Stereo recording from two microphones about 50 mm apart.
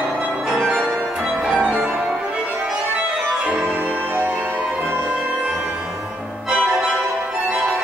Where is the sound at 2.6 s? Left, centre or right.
Right.